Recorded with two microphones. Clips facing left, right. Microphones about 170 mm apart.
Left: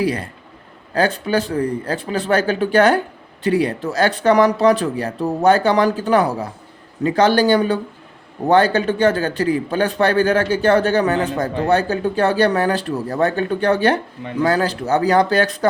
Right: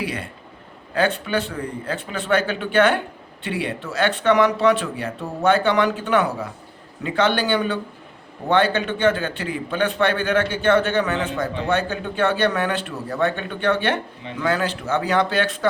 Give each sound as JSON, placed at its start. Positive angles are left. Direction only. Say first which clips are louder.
{"t": 0.0, "sound": "a man's voice", "louder": "left 7 dB", "side_deg": 35}